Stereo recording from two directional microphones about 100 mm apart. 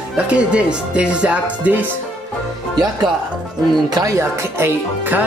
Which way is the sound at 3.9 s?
35° right (ahead or behind).